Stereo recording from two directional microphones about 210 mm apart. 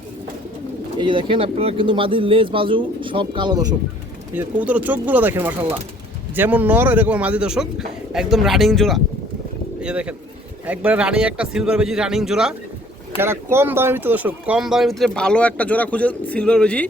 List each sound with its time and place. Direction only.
0.9 s speech: 25° right (ahead or behind)
4.4 s speech: 5° right (ahead or behind)